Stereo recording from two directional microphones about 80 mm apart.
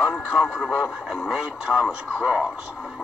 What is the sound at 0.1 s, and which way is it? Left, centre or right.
Speech, centre.